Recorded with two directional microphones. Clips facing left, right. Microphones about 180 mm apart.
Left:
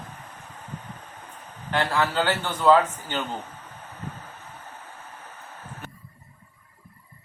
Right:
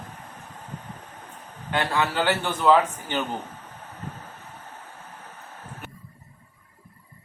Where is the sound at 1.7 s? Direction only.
15° right (ahead or behind).